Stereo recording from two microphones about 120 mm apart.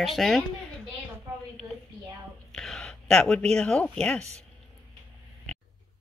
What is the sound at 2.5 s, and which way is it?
Speech, 5° left (ahead or behind).